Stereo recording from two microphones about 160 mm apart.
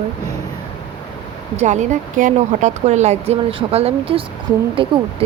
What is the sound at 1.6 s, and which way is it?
Speech, 50° right (ahead or behind).